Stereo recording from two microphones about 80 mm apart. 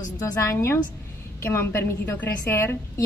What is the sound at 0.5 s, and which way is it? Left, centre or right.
A woman's voice, left.